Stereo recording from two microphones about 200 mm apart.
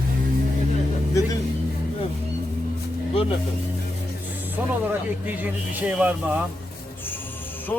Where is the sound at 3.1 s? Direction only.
30° left (ahead or behind).